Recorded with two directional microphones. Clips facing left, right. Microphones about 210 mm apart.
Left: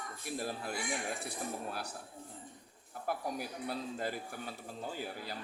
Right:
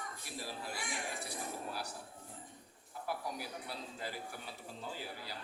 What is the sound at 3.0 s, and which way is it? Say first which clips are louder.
A man's voice: left 4 dB; 50° left (ahead or behind).